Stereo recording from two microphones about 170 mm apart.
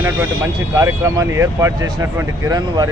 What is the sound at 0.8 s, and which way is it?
Speech, 20° right (ahead or behind).